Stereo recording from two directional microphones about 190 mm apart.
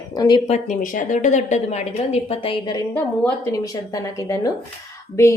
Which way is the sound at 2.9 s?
10° left (ahead or behind).